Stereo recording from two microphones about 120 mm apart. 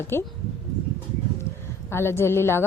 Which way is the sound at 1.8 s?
20° left (ahead or behind).